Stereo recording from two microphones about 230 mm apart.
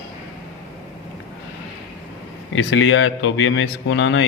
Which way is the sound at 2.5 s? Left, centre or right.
Left.